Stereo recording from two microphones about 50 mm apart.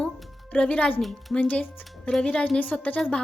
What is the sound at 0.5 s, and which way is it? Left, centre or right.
A woman's voice, left.